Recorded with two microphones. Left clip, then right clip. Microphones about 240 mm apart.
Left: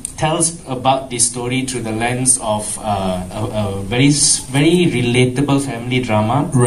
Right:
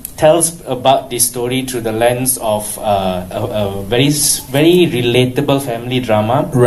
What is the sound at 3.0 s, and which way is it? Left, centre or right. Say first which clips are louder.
A man's voice: right 4 dB; left.